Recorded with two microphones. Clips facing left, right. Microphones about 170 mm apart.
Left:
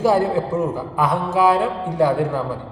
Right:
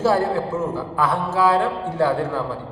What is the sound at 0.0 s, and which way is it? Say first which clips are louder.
A man's voice: left 2 dB; 15° left (ahead or behind).